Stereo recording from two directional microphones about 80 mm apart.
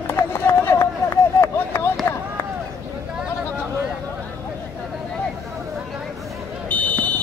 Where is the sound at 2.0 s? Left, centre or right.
Left.